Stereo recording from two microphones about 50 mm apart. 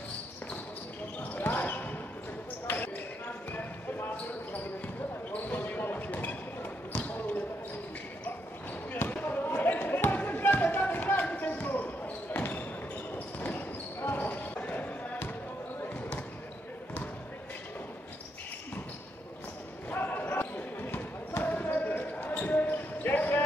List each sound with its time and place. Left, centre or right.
1.4 s basketball bounce: left
9.1 s basketball bounce: left
19.9 s basketball bounce: left